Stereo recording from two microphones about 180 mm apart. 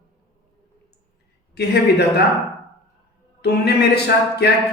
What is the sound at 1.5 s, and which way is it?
Speech, 65° left (ahead or behind).